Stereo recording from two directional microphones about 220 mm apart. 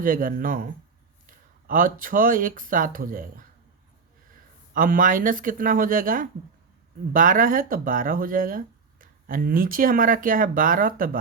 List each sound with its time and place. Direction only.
0.0 s speech: 40° right (ahead or behind)
4.7 s speech: 40° right (ahead or behind)